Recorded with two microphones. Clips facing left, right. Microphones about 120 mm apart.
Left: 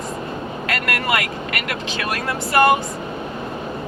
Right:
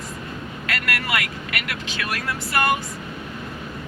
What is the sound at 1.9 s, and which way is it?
Speech, 35° left (ahead or behind).